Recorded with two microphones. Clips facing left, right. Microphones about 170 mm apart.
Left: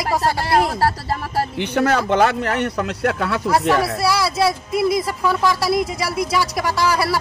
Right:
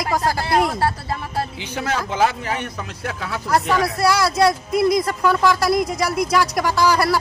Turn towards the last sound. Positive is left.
turn(degrees=0)  # may be behind; listen again after turning